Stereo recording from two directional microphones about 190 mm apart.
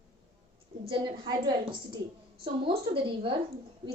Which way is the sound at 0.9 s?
20° right (ahead or behind).